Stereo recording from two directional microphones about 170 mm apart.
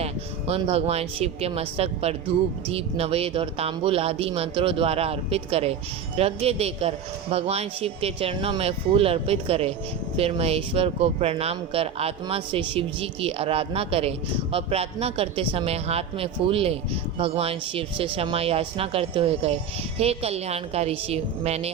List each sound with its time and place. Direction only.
0.0 s speech: 35° right (ahead or behind)